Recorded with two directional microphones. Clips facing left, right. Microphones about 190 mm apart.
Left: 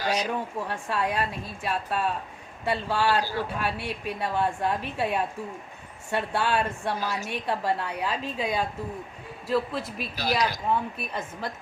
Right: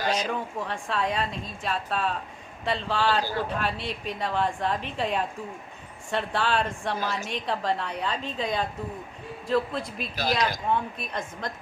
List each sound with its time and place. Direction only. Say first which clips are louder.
0.0 s speech: even; 50° right (ahead or behind)
0.6 s speech: even; 5° left (ahead or behind)
10.2 s speech: even; 50° right (ahead or behind)
10.7 s speech: even; 5° left (ahead or behind)